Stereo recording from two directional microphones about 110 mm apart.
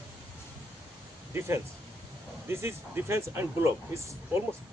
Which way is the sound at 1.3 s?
25° right (ahead or behind).